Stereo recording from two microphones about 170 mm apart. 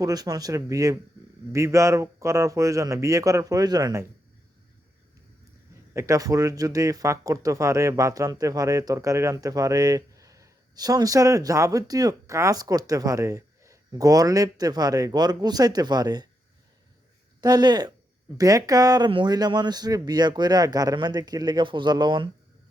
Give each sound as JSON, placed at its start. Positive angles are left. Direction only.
{"t": 0.0, "sound": "speech", "side_deg": -20}
{"t": 5.9, "sound": "speech", "side_deg": -20}
{"t": 17.4, "sound": "speech", "side_deg": -25}